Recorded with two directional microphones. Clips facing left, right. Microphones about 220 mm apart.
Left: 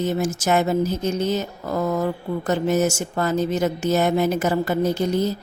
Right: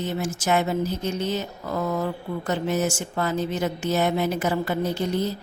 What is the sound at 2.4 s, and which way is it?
A woman's voice, 45° left (ahead or behind).